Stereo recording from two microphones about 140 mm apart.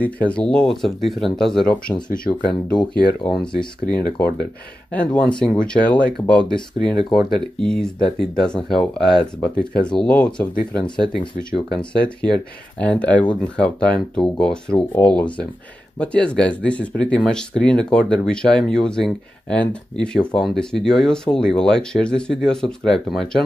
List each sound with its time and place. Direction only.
0.0 s speech: 10° left (ahead or behind)
4.0 s speech: 90° left
4.9 s speech: 10° left (ahead or behind)